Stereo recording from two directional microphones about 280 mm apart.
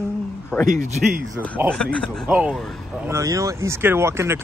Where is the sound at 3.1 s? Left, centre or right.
Centre.